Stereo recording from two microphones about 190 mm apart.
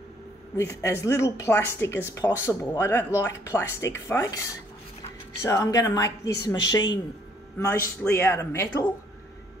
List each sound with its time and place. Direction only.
0.8 s speech: 15° left (ahead or behind)
5.4 s speech: 15° left (ahead or behind)